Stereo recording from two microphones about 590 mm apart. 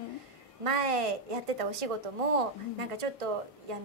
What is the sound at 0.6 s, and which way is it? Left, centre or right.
A woman's voice, right.